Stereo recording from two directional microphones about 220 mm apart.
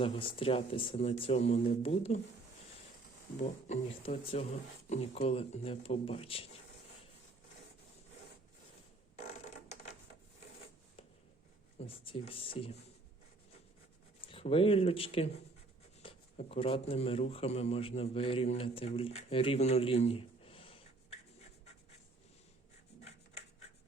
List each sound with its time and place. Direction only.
0.0 s a man's voice: 25° left (ahead or behind)
3.7 s a man's voice: 25° left (ahead or behind)
11.8 s a man's voice: 25° left (ahead or behind)
14.2 s a man's voice: 25° left (ahead or behind)